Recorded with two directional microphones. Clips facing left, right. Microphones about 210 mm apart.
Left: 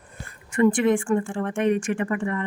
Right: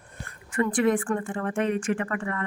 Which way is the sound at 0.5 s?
25° left (ahead or behind).